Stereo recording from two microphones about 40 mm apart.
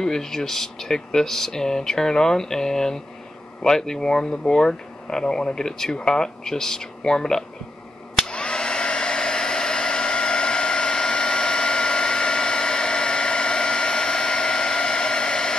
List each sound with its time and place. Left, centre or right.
0.0 s speech: centre
8.2 s hair dryer: left